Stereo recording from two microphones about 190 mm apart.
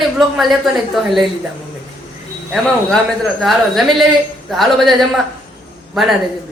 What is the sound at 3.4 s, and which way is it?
Speech, centre (ahead or behind).